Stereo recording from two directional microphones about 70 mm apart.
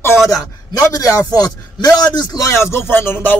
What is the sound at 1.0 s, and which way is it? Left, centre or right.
A man's voice, left.